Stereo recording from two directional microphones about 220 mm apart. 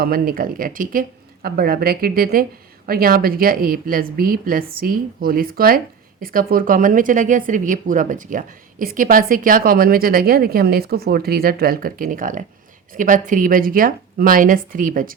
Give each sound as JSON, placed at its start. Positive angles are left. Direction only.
{"t": 0.0, "sound": "speech", "side_deg": -40}